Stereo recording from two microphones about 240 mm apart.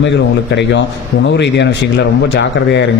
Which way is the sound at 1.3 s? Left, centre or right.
Left.